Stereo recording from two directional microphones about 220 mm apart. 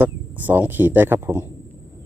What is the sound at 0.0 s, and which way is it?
Speech, 10° right (ahead or behind).